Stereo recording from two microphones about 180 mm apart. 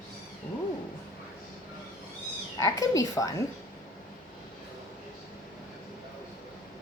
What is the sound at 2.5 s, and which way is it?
Speech, 15° left (ahead or behind).